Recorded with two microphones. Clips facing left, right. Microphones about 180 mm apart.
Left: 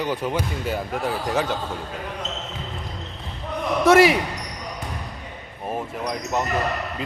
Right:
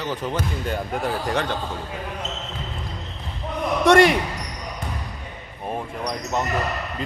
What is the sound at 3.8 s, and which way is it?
Speech, 5° left (ahead or behind).